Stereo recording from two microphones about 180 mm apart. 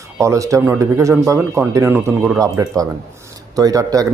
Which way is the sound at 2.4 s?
20° right (ahead or behind).